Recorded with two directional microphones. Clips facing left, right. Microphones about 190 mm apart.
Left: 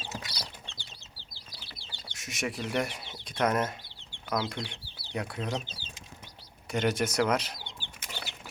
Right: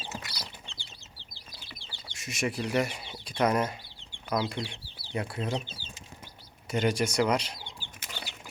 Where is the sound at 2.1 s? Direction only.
Centre (ahead or behind).